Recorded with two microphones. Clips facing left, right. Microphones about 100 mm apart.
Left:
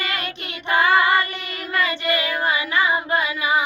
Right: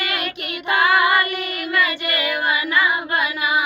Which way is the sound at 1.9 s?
25° left (ahead or behind).